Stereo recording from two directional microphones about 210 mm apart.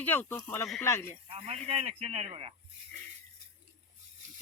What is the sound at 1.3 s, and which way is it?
Speech, 30° right (ahead or behind).